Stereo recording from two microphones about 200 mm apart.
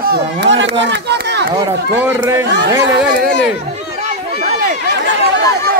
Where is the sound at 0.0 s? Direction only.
55° right (ahead or behind).